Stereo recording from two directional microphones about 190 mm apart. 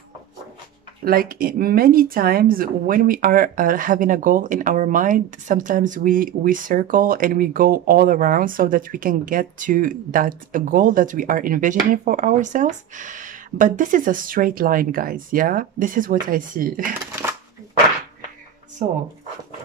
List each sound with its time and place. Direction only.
1.0 s speech: 50° right (ahead or behind)
17.1 s shuffling cards: 10° right (ahead or behind)